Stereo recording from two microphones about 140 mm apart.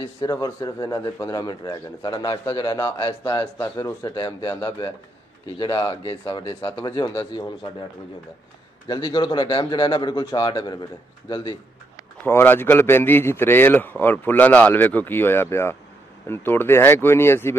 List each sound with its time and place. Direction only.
0.2 s a man's voice: 25° left (ahead or behind)
8.8 s a man's voice: 30° left (ahead or behind)
12.3 s a man's voice: 15° left (ahead or behind)